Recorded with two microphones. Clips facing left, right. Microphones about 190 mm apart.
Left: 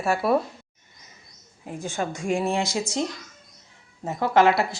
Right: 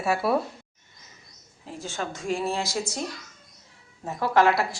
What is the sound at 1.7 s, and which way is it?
Speech, 15° left (ahead or behind).